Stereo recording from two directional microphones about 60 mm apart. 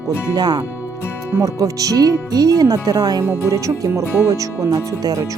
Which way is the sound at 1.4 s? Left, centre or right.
Right.